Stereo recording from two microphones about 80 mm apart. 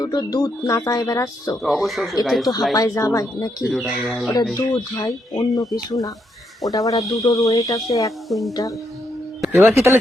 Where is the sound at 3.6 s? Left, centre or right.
Centre.